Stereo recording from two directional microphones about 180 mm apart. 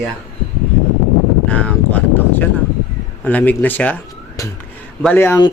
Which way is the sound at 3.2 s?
10° left (ahead or behind).